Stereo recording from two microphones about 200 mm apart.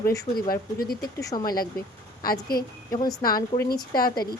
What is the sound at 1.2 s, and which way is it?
Speech, 20° left (ahead or behind).